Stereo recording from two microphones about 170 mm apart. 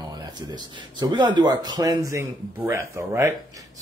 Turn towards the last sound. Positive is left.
turn(degrees=-15)  # may be behind; listen again after turning